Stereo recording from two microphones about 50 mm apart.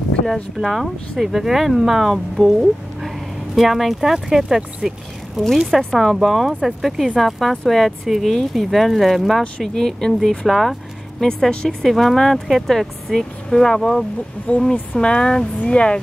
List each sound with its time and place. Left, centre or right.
0.6 s speech: centre
2.4 s speech: centre
3.5 s speech: centre
5.7 s speech: centre
10.4 s vehicle: centre
11.2 s speech: centre